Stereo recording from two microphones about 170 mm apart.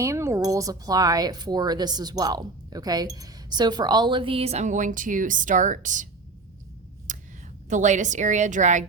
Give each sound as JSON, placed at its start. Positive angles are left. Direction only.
{"t": 0.0, "sound": "speech", "side_deg": -15}
{"t": 7.1, "sound": "a sound", "side_deg": -45}
{"t": 7.7, "sound": "a woman's voice", "side_deg": -45}